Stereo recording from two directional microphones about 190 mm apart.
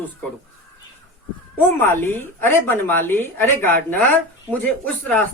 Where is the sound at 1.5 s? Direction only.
10° left (ahead or behind).